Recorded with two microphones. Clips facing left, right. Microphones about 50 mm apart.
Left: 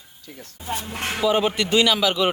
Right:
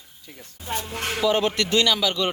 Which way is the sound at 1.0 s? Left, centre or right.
Centre.